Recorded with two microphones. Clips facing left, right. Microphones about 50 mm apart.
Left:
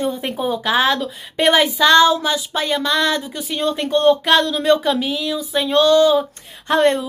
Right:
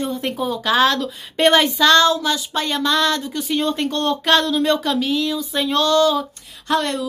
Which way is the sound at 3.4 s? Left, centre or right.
Centre.